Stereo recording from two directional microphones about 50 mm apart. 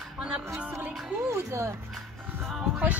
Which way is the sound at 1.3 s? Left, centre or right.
Right.